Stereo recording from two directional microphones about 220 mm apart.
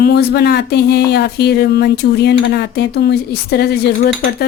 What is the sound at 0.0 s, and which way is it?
Speech, 45° left (ahead or behind).